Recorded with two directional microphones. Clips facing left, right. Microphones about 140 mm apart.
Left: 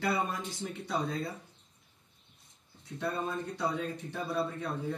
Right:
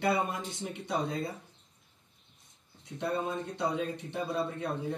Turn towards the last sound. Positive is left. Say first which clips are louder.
# right 1 dB
turn(degrees=-20)  # may be behind; listen again after turning